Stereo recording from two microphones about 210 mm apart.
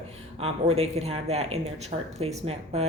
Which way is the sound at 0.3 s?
30° right (ahead or behind).